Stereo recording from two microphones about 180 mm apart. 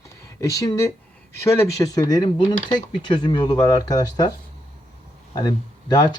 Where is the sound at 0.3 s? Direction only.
15° left (ahead or behind).